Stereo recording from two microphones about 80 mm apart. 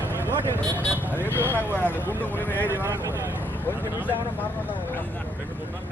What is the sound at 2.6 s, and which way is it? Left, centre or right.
Speech, right.